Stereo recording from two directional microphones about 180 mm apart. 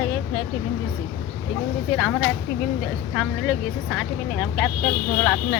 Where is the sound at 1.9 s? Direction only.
Centre (ahead or behind).